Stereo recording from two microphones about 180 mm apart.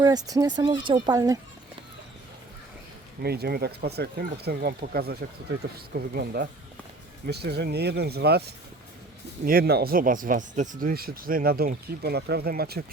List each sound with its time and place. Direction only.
0.0 s speech: 20° right (ahead or behind)
3.2 s speech: 60° right (ahead or behind)